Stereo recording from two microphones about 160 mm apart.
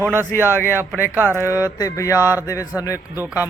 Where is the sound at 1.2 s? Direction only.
10° left (ahead or behind).